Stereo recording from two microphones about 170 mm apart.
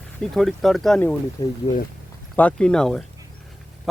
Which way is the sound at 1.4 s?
25° left (ahead or behind).